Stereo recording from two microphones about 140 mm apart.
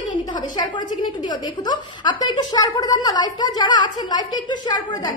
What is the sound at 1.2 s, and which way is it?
A woman's voice, 30° left (ahead or behind).